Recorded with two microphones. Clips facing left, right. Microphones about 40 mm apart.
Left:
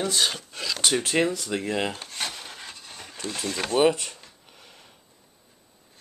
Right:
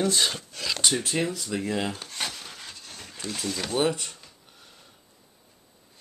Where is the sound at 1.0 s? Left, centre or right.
Left.